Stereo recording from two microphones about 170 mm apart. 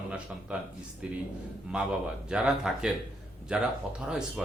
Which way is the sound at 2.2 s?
5° right (ahead or behind).